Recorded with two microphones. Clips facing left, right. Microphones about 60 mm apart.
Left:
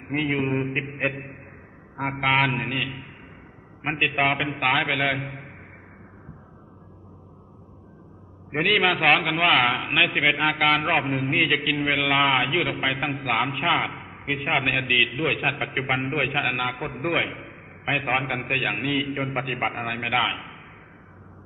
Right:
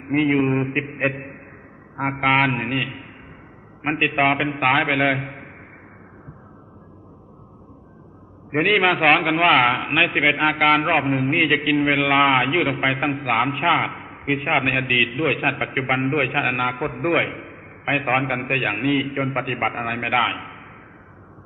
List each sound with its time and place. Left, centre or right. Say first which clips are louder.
0.1 s a man's voice: right 6 dB; centre
1.1 s a man's voice: right 3 dB; right
2.0 s a man's voice: right 3 dB; centre
8.5 s a man's voice: right 4 dB; centre
13.0 s a man's voice: right 4 dB; centre
13.3 s a man's voice: right 4 dB; centre